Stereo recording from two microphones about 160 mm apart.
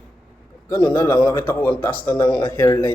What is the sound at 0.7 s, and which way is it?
A man's voice, 20° left (ahead or behind).